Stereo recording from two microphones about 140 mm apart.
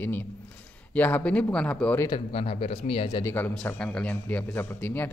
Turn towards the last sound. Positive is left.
turn(degrees=10)  # may be behind; listen again after turning